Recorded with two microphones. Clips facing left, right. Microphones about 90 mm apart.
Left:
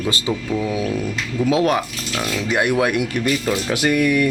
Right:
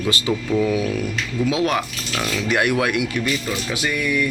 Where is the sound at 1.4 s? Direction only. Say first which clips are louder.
Left 3 dB; 40° left (ahead or behind).